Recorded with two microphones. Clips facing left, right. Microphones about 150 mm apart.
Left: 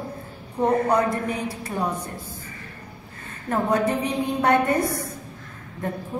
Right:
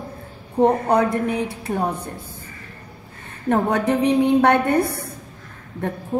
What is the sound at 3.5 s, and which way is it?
A woman's voice, 65° right (ahead or behind).